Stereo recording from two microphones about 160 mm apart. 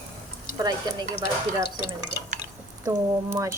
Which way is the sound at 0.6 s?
25° right (ahead or behind).